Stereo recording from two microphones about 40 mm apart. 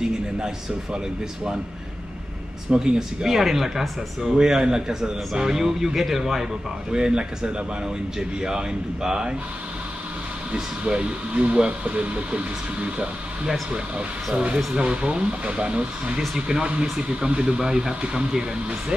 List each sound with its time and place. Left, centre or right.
0.9 s speech: right
2.7 s a man's voice: centre
6.9 s speech: centre
10.5 s a man's voice: right